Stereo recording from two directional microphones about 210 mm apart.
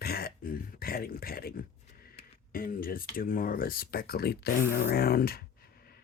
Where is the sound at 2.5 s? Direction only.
45° left (ahead or behind).